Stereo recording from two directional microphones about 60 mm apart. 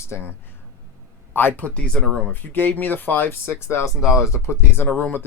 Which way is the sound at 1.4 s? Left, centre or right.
Left.